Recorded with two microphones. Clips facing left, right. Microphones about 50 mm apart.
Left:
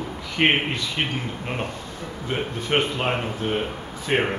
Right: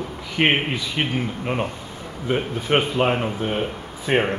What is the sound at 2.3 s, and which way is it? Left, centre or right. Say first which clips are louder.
A man's voice: right 4 dB; centre.